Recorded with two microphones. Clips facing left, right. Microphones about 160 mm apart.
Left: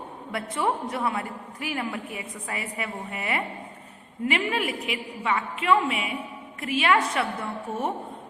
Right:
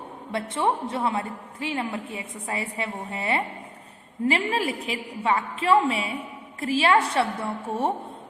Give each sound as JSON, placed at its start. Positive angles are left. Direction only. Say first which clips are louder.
{"t": 0.3, "sound": "a woman's voice", "louder": "right 2 dB", "side_deg": -25}